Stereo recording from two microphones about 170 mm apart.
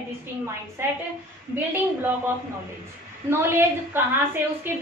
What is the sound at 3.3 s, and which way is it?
Speech, 15° right (ahead or behind).